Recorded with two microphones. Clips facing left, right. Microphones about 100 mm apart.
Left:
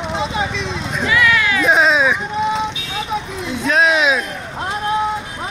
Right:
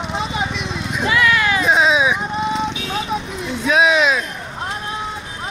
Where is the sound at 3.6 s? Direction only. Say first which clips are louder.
Even; 5° right (ahead or behind).